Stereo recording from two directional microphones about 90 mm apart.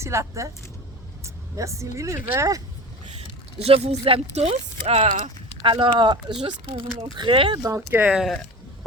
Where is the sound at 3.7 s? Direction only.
90° right.